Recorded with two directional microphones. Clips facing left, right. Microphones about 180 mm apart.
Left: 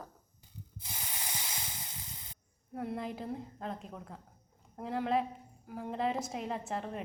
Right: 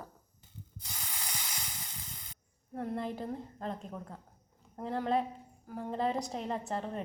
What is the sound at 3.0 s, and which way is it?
A woman's voice, centre (ahead or behind).